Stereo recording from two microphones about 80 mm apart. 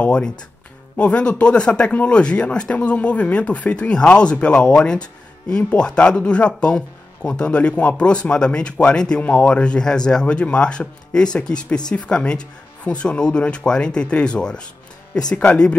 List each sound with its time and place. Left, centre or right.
0.0 s speech: centre